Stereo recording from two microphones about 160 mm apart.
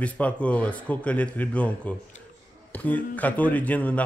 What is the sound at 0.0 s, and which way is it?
Speech, 10° left (ahead or behind).